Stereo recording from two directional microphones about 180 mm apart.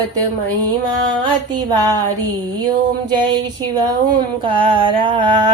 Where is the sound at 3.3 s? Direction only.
20° right (ahead or behind).